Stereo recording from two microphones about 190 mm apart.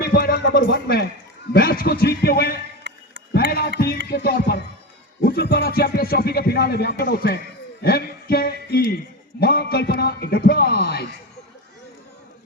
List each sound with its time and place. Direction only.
0.0 s music: 55° left (ahead or behind)
1.5 s speech: 50° left (ahead or behind)
2.8 s music: 75° right (ahead or behind)
3.3 s a sound: 55° left (ahead or behind)
4.1 s speech: 60° left (ahead or behind)
7.8 s music: 55° left (ahead or behind)
9.4 s speech: 55° left (ahead or behind)